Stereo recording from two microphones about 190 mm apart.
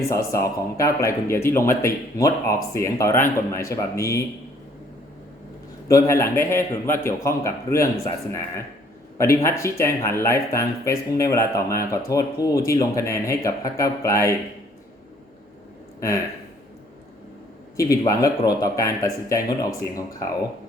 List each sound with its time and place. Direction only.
0.3 s speech: 15° left (ahead or behind)
5.9 s speech: 15° left (ahead or behind)
17.7 s speech: 15° left (ahead or behind)